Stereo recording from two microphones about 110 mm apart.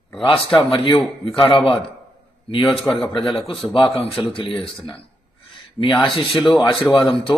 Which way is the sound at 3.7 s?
55° left (ahead or behind).